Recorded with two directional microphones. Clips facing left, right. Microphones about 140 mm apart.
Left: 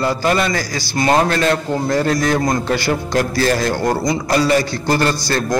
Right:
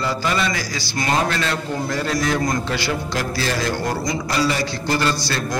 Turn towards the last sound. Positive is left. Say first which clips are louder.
# left 4 dB
turn(degrees=45)  # may be behind; listen again after turning